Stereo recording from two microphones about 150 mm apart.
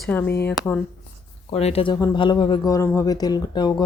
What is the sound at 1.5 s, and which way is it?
Speech, 45° left (ahead or behind).